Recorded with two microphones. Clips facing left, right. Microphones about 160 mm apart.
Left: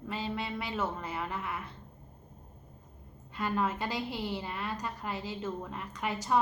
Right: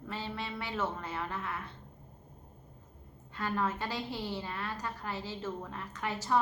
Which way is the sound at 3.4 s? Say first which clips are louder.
Left 2 dB; 15° left (ahead or behind).